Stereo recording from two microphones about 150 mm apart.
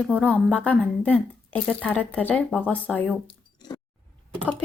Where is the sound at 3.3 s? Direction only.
30° left (ahead or behind).